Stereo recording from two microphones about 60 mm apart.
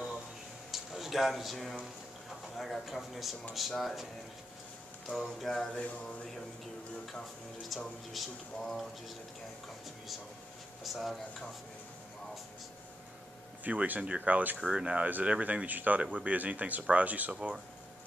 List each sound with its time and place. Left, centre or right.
0.7 s a sound: centre
2.5 s a man's voice: centre
7.7 s a man's voice: centre
10.8 s speech: centre
13.7 s speech: right